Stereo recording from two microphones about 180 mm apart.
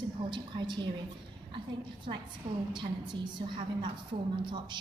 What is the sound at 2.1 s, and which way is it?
Speech, 40° right (ahead or behind).